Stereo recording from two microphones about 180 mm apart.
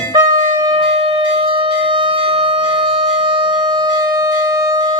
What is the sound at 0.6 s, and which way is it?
Wind instrument, 25° right (ahead or behind).